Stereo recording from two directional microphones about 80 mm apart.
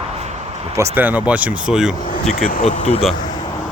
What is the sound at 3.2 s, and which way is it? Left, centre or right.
Vehicle, left.